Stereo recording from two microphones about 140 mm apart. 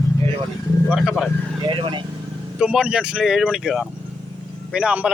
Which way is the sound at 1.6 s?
35° right (ahead or behind).